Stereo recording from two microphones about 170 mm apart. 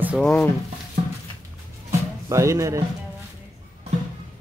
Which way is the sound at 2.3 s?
20° right (ahead or behind).